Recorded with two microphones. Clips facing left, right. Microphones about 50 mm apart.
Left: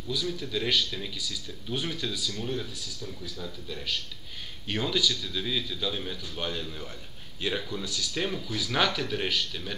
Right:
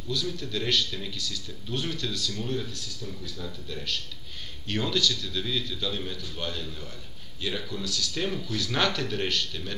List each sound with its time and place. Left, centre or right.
0.1 s speech: centre